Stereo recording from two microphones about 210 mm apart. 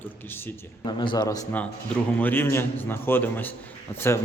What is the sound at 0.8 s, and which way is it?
A man's voice, 20° left (ahead or behind).